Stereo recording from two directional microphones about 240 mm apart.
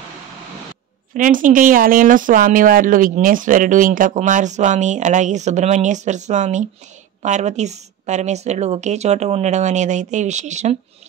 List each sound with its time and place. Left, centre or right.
1.1 s a woman's voice: right